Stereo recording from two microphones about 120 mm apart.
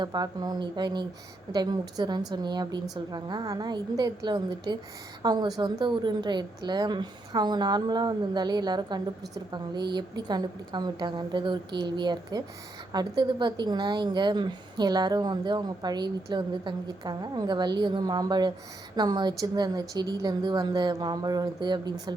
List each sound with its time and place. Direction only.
0.0 s a woman's voice: 35° right (ahead or behind)